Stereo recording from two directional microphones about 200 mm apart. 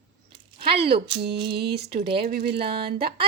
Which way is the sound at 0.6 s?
25° right (ahead or behind).